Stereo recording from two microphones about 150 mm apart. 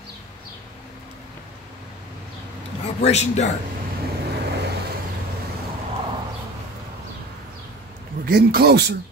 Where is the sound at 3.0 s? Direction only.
50° left (ahead or behind).